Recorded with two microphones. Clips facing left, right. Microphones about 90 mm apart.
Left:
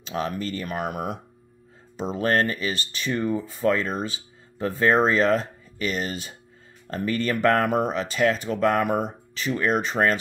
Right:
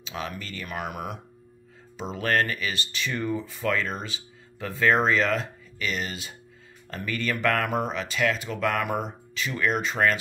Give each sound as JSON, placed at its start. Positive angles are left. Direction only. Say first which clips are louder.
{"t": 0.0, "sound": "speech", "louder": "left 7 dB", "side_deg": 35}